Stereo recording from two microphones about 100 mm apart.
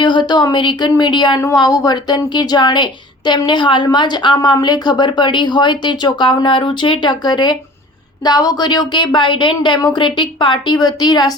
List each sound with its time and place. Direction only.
0.0 s speech: 50° left (ahead or behind)
1.4 s speech: 35° left (ahead or behind)